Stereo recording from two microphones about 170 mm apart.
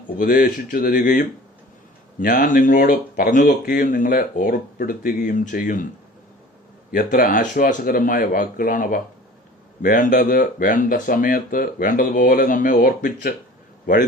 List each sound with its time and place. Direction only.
0.2 s speech: 55° left (ahead or behind)
6.9 s speech: 55° left (ahead or behind)